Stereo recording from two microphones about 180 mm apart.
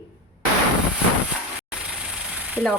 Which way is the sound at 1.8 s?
5° right (ahead or behind).